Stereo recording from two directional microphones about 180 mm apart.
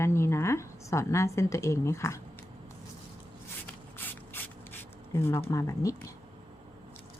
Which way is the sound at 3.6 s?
10° left (ahead or behind).